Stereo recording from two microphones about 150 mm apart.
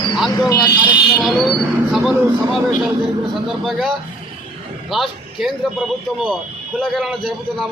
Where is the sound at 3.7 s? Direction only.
Centre (ahead or behind).